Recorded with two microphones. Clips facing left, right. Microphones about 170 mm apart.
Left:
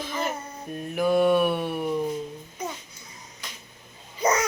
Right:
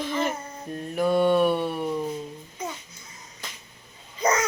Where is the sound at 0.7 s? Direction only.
5° left (ahead or behind).